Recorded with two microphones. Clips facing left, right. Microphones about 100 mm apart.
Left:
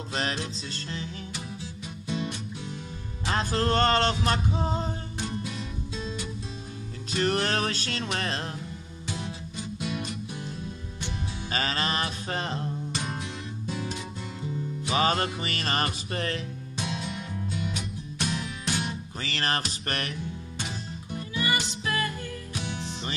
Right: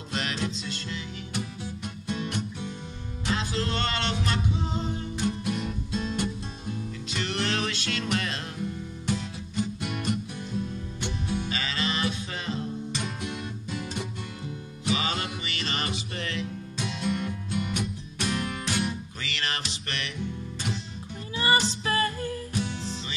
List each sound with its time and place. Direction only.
0.1 s music: 35° left (ahead or behind)
2.0 s music: 55° right (ahead or behind)
3.3 s music: 45° left (ahead or behind)
5.4 s music: 55° right (ahead or behind)
7.1 s music: 40° left (ahead or behind)
9.8 s music: 55° right (ahead or behind)
11.4 s music: 45° left (ahead or behind)
14.9 s music: 45° left (ahead or behind)
17.0 s music: 55° right (ahead or behind)
19.2 s music: 40° left (ahead or behind)
21.4 s music: 35° right (ahead or behind)